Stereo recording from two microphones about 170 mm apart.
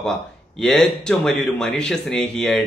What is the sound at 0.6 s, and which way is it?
Speech, 5° left (ahead or behind).